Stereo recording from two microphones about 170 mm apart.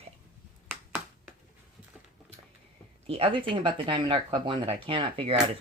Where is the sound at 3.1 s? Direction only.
35° right (ahead or behind).